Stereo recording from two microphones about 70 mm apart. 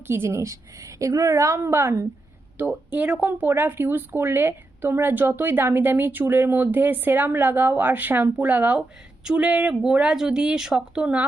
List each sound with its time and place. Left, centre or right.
0.1 s a woman's voice: right
2.6 s speech: right; by 11.2 s centre